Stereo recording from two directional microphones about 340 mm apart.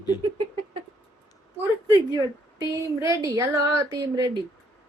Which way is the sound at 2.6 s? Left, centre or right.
Centre.